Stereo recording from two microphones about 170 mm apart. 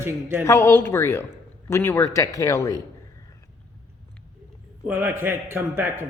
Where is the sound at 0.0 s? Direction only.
10° right (ahead or behind).